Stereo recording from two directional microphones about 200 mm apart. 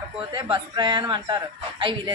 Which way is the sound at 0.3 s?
25° right (ahead or behind).